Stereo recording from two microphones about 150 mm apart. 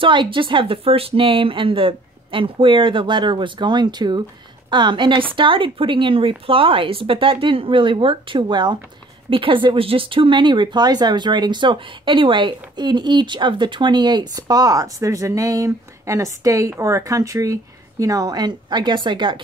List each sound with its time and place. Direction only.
0.0 s speech: 35° right (ahead or behind)